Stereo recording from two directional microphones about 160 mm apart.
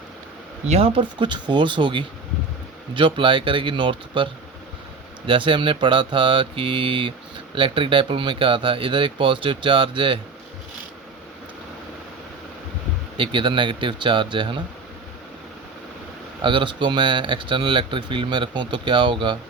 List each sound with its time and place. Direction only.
0.7 s speech: 40° right (ahead or behind)
13.1 s speech: 30° right (ahead or behind)
16.4 s speech: 30° right (ahead or behind)